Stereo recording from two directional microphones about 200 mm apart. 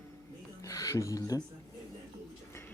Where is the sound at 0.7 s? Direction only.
15° left (ahead or behind).